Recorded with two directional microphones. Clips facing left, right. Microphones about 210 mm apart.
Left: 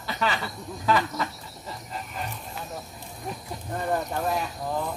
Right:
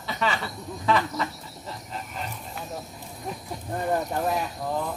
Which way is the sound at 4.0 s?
Centre (ahead or behind).